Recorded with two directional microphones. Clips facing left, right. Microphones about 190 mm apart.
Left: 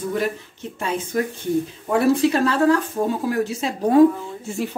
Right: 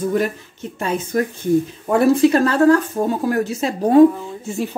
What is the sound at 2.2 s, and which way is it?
Speech, 45° right (ahead or behind).